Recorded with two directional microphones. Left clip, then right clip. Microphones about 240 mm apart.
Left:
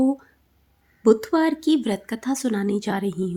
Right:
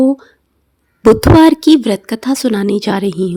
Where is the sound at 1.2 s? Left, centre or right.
Right.